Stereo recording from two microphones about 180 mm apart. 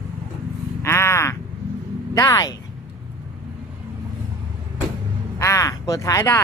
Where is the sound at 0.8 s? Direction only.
15° left (ahead or behind).